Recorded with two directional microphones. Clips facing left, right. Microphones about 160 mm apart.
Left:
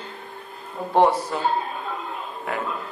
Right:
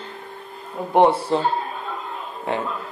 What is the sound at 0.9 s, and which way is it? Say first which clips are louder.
Speech: right 3 dB; 25° right (ahead or behind).